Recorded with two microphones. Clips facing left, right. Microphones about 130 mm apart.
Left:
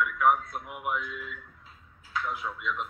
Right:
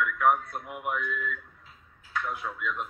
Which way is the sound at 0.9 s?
50° right (ahead or behind).